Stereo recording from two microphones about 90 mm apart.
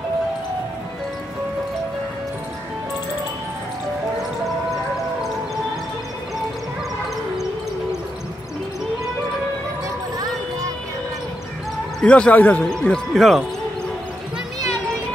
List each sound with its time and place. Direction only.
12.0 s speech: 10° left (ahead or behind)